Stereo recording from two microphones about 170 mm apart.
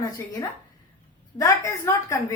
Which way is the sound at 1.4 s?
20° left (ahead or behind).